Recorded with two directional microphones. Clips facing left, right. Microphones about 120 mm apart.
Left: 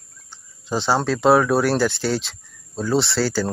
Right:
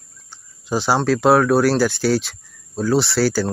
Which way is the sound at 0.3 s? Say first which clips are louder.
Right 3 dB; 5° right (ahead or behind).